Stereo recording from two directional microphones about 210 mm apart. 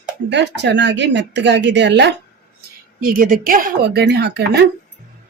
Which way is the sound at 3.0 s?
40° right (ahead or behind).